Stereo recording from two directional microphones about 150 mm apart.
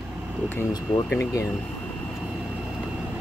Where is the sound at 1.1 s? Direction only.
20° left (ahead or behind).